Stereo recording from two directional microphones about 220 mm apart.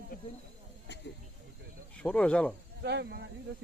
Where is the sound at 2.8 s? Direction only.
50° right (ahead or behind).